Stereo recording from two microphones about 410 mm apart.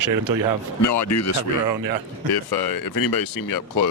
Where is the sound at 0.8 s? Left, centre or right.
Left.